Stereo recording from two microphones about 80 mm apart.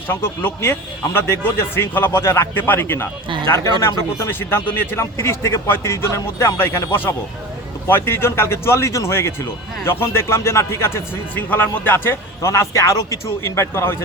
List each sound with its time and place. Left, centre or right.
0.1 s speech: left
7.9 s speech: left